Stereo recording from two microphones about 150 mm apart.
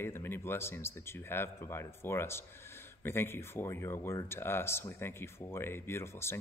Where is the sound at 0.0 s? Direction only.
15° left (ahead or behind).